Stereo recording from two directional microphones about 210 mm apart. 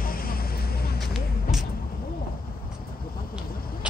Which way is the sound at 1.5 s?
Centre (ahead or behind).